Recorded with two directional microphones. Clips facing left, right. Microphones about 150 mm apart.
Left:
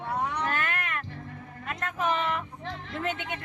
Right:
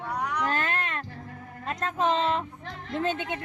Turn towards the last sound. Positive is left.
turn(degrees=-30)  # may be behind; listen again after turning